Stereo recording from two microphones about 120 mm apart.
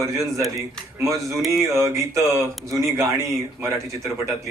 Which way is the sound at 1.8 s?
25° right (ahead or behind).